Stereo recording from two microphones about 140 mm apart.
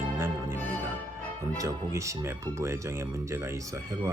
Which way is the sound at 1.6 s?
20° right (ahead or behind).